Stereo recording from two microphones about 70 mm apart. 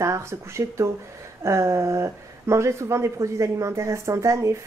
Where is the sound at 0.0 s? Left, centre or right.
Right.